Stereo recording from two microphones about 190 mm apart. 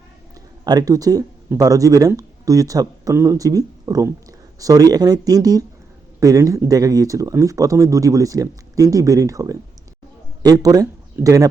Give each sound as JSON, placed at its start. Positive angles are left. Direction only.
{"t": 0.6, "sound": "speech", "side_deg": -20}